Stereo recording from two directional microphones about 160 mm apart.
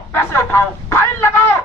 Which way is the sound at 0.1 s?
15° left (ahead or behind).